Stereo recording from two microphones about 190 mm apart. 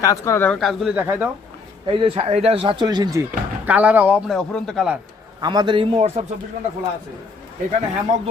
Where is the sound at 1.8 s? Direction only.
30° right (ahead or behind); by 5.0 s centre (ahead or behind).